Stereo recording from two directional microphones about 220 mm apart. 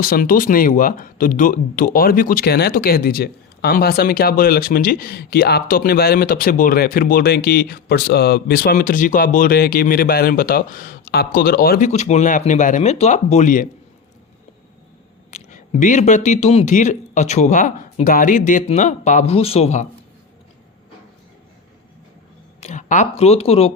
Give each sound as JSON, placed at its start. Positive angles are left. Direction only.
{"t": 0.0, "sound": "speech", "side_deg": 40}
{"t": 15.3, "sound": "speech", "side_deg": 35}
{"t": 22.6, "sound": "speech", "side_deg": 35}